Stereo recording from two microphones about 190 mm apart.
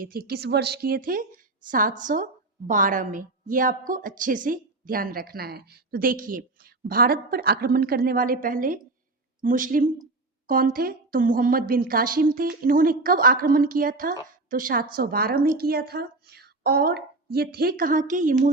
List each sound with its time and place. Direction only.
0.0 s a woman's voice: 55° right (ahead or behind)